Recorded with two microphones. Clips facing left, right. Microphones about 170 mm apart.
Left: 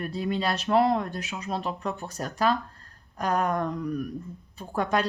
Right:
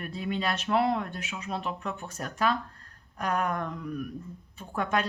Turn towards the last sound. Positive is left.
turn(degrees=35)  # may be behind; listen again after turning